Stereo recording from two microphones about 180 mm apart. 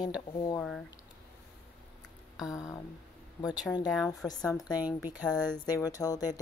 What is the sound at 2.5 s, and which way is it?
Speech, 20° left (ahead or behind).